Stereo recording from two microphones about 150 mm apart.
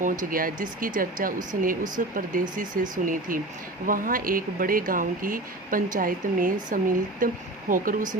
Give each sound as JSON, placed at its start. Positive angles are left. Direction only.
{"t": 0.0, "sound": "speech", "side_deg": -65}